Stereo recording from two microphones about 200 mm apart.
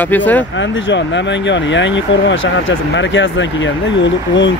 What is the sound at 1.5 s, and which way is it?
Speech, 65° left (ahead or behind).